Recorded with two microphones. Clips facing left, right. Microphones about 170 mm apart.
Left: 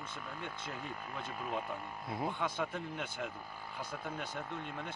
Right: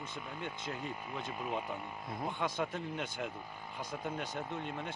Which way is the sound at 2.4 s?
Centre (ahead or behind).